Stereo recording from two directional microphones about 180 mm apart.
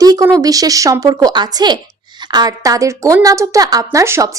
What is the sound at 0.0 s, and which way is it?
A woman's voice, 20° right (ahead or behind).